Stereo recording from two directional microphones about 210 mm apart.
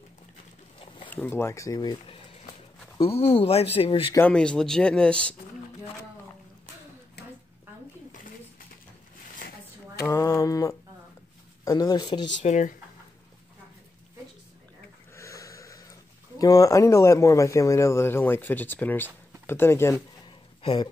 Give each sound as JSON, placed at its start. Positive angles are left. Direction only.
{"t": 1.0, "sound": "speech", "side_deg": 10}
{"t": 4.1, "sound": "speech", "side_deg": 5}
{"t": 10.0, "sound": "mantra", "side_deg": 15}
{"t": 11.6, "sound": "speech", "side_deg": 15}
{"t": 12.4, "sound": "speech", "side_deg": 35}
{"t": 15.1, "sound": "speech", "side_deg": 15}
{"t": 20.6, "sound": "speech", "side_deg": 25}